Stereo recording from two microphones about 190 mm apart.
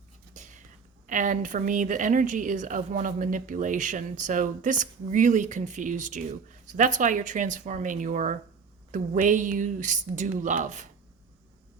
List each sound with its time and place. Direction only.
0.3 s whispering: 40° right (ahead or behind)
1.0 s speech: 45° right (ahead or behind)